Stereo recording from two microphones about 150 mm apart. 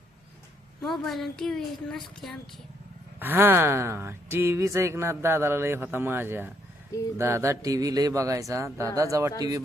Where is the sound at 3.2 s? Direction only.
15° right (ahead or behind).